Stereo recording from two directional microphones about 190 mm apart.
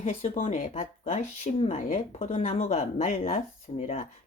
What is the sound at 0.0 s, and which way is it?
Speech, 30° left (ahead or behind).